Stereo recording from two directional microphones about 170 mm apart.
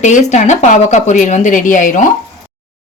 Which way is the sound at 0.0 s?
45° left (ahead or behind).